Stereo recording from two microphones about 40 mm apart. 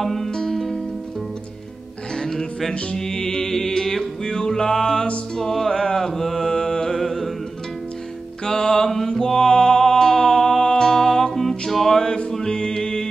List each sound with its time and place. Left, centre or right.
0.0 s music: centre
2.1 s music: centre
7.0 s music: centre
8.5 s music: centre
12.0 s music: centre